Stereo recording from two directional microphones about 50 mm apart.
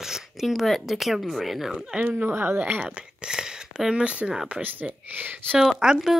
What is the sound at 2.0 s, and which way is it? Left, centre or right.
Speech, right.